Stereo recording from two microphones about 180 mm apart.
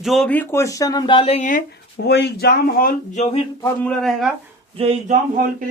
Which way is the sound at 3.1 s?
35° left (ahead or behind).